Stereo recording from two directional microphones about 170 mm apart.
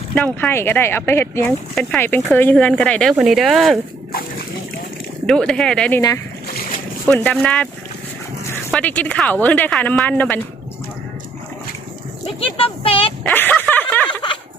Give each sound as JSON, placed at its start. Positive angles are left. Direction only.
{"t": 0.1, "sound": "speech", "side_deg": 10}
{"t": 5.2, "sound": "speech", "side_deg": 5}
{"t": 7.1, "sound": "speech", "side_deg": 10}
{"t": 8.7, "sound": "speech", "side_deg": 10}
{"t": 12.4, "sound": "speech", "side_deg": 35}
{"t": 13.2, "sound": "speech", "side_deg": 10}
{"t": 14.1, "sound": "a sound", "side_deg": 30}